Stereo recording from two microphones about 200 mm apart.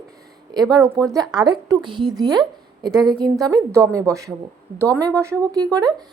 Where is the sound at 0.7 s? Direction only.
15° right (ahead or behind).